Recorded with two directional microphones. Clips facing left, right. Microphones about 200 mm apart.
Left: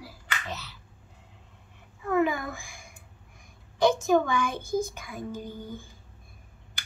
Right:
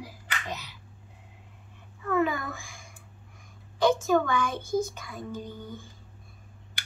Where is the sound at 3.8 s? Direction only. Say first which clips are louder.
Left 1 dB; 15° left (ahead or behind).